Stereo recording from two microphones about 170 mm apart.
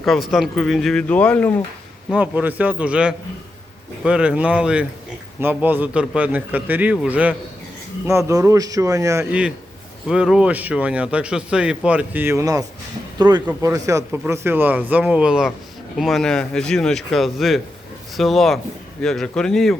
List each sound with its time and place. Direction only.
0.0 s speech: centre (ahead or behind)
2.1 s speech: 10° right (ahead or behind)
8.3 s a man's voice: 20° right (ahead or behind)
10.1 s speech: 5° right (ahead or behind)